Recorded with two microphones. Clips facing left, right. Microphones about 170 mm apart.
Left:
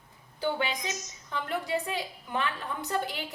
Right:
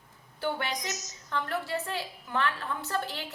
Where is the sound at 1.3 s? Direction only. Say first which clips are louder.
Left 1 dB; 15° left (ahead or behind).